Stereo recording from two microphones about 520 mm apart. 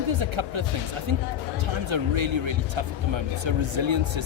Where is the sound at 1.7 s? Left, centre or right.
Right.